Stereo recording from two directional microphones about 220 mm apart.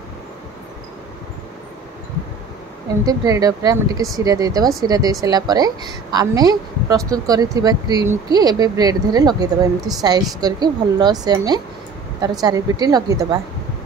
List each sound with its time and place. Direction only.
3.1 s a woman's voice: 15° right (ahead or behind)